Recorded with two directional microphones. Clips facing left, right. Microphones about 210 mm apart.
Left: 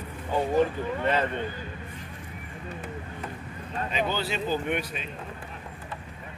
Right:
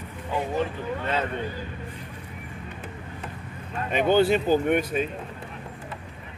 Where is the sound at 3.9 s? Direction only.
55° right (ahead or behind).